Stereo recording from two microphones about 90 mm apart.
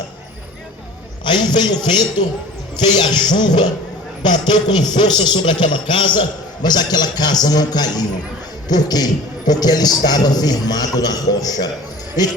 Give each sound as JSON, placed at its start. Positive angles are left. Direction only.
{"t": 1.2, "sound": "a man's voice", "side_deg": 55}